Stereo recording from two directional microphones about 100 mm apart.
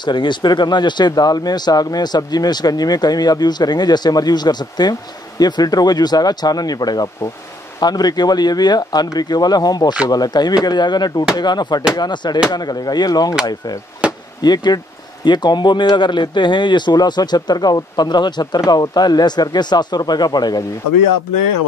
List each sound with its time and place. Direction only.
0.0 s speech: 50° left (ahead or behind)
14.0 s chop: 10° right (ahead or behind)
14.4 s speech: 45° left (ahead or behind)